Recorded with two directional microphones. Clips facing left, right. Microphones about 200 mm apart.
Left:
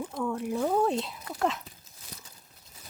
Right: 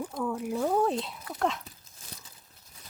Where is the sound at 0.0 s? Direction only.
5° right (ahead or behind).